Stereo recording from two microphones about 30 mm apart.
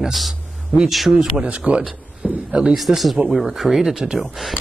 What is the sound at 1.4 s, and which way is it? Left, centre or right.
Speech, right.